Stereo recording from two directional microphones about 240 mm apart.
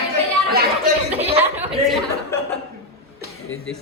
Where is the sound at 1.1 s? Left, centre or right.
Right.